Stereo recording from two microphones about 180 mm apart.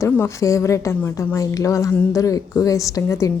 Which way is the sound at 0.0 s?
15° left (ahead or behind).